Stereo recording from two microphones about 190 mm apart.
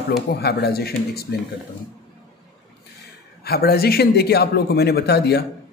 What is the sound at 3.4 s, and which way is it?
A man's voice, 55° left (ahead or behind).